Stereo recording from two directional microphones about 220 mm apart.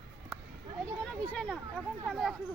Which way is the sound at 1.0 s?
5° left (ahead or behind).